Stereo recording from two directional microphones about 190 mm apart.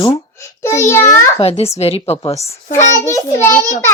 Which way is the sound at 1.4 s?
30° left (ahead or behind).